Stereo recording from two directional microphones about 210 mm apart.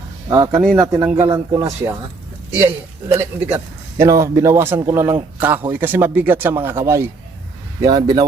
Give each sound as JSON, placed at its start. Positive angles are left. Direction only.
{"t": 0.3, "sound": "a man's voice", "side_deg": -15}
{"t": 3.2, "sound": "a man's voice", "side_deg": -10}